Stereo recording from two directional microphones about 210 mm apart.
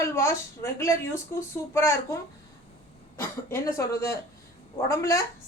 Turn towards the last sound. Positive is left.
turn(degrees=15)  # may be behind; listen again after turning